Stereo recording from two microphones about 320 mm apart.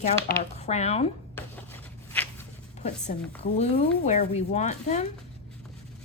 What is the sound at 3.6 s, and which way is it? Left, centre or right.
Speech, left.